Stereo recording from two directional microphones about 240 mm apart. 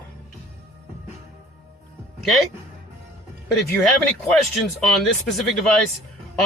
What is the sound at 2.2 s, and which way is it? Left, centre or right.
Speech, centre.